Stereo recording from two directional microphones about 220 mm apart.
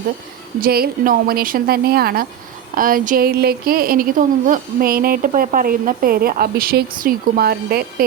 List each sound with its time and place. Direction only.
0.6 s a woman's voice: 40° right (ahead or behind)